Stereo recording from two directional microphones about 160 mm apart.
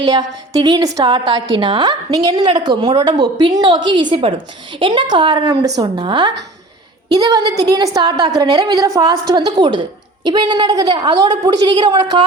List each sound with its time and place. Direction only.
0.0 s a woman's voice: 25° right (ahead or behind)